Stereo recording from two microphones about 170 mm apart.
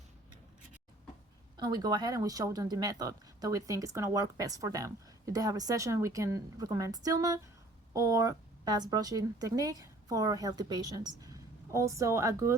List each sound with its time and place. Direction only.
1.5 s a woman's voice: 25° right (ahead or behind)